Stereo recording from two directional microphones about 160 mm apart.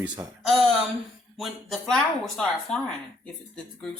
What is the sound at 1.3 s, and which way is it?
Speech, centre (ahead or behind).